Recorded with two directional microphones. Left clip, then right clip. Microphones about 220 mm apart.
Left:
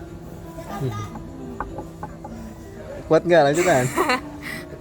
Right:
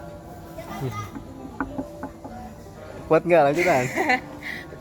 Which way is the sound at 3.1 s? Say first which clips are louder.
Left 2 dB; 10° left (ahead or behind).